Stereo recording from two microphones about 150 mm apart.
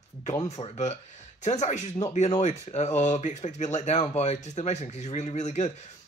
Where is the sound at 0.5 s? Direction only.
50° left (ahead or behind).